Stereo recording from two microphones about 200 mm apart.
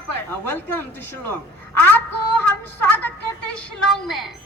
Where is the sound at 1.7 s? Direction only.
10° left (ahead or behind).